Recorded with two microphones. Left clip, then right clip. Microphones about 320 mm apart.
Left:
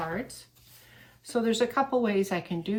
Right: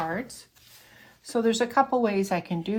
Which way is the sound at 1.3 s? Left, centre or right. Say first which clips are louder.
Right 3 dB; centre.